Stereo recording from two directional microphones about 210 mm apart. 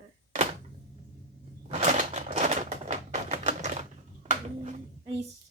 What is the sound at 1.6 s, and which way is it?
Typewriter, 35° right (ahead or behind).